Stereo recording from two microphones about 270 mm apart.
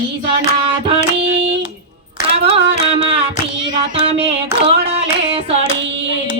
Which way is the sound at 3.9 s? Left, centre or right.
Right.